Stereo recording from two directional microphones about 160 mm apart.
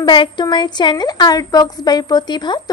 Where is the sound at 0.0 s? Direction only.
30° left (ahead or behind).